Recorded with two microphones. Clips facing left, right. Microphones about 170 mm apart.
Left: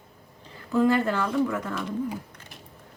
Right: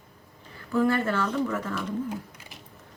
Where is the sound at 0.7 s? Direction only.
15° left (ahead or behind).